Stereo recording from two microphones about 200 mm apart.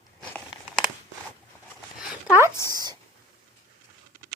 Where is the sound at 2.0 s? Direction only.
5° right (ahead or behind).